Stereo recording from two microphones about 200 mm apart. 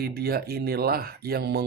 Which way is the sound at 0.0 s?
50° right (ahead or behind).